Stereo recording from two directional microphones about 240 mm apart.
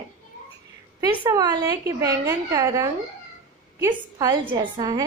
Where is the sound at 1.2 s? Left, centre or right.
Centre.